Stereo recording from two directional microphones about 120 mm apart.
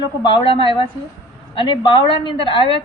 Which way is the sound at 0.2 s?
45° left (ahead or behind).